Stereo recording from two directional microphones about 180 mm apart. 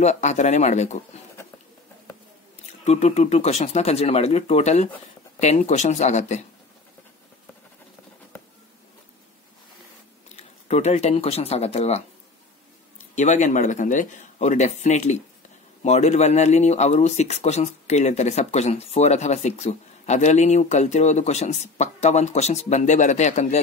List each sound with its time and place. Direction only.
0.0 s speech: 40° left (ahead or behind)
2.8 s speech: 35° left (ahead or behind)
10.3 s speech: 40° left (ahead or behind)
13.1 s speech: 40° left (ahead or behind)